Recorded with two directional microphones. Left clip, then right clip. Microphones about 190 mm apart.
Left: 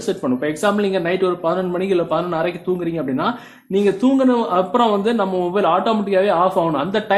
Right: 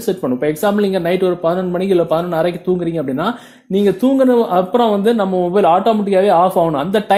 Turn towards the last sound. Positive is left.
turn(degrees=-35)  # may be behind; listen again after turning